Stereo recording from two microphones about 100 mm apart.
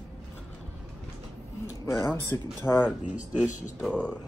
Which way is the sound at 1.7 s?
30° left (ahead or behind).